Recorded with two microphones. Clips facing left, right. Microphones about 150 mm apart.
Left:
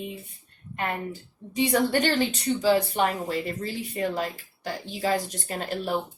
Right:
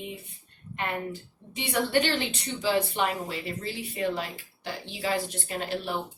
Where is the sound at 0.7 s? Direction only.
40° left (ahead or behind).